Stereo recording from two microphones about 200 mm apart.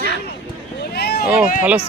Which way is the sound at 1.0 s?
55° left (ahead or behind).